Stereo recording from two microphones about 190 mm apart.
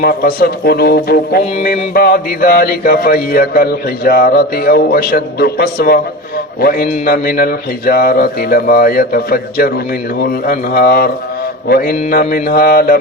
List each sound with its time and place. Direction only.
0.0 s a man's voice: 50° left (ahead or behind)